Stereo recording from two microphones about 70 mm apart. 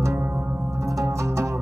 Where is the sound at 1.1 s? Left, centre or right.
Right.